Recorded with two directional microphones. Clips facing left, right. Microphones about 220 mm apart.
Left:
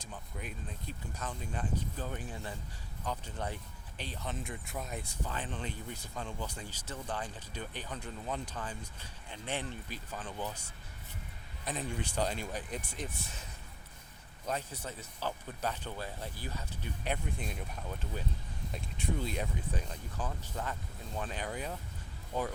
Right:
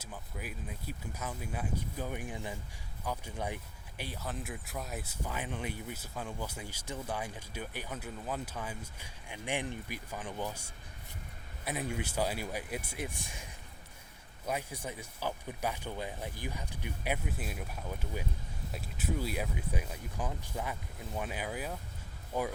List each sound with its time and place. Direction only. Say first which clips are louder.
0.0 s speech: right 1 dB; 5° right (ahead or behind)